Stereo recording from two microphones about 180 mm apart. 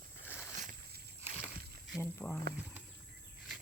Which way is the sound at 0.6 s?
50° right (ahead or behind).